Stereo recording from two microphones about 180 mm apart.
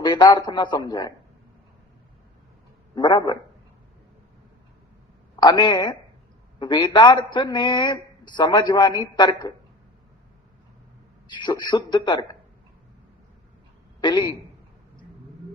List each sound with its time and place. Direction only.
0.0 s speech: 25° left (ahead or behind)
2.9 s speech: 25° left (ahead or behind)
5.4 s speech: 25° left (ahead or behind)
11.3 s speech: 25° left (ahead or behind)
14.0 s speech: 25° left (ahead or behind)